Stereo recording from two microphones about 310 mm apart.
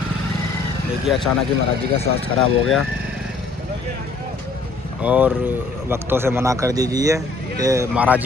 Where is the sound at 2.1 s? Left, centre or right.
Left.